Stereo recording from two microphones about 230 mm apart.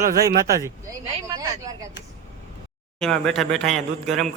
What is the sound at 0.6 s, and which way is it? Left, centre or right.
Speech, centre.